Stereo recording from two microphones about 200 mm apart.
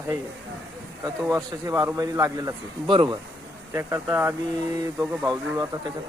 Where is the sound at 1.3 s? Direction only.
15° right (ahead or behind).